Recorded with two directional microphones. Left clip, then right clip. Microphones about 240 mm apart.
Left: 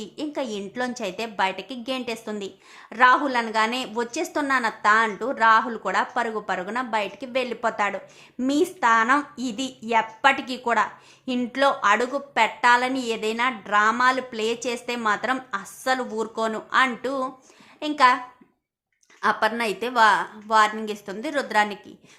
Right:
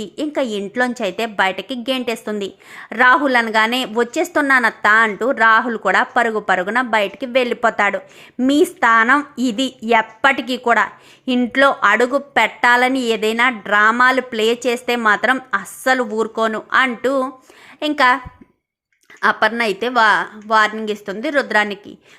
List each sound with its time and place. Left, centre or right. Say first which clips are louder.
0.0 s a woman's voice: right 9 dB; centre
19.2 s a woman's voice: right 7 dB; centre